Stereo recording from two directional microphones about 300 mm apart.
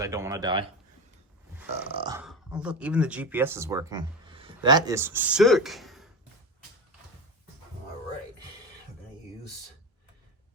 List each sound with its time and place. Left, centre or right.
0.0 s speech: centre
1.7 s burping: centre
2.2 s speech: centre